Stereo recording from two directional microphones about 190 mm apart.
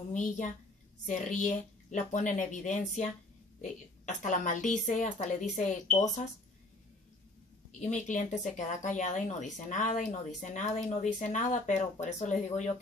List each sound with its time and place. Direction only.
0.1 s speech: 40° left (ahead or behind)
4.2 s speech: 40° left (ahead or behind)
7.8 s speech: 40° left (ahead or behind)